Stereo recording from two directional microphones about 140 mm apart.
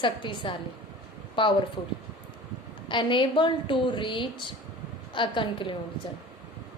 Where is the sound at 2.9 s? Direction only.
35° left (ahead or behind).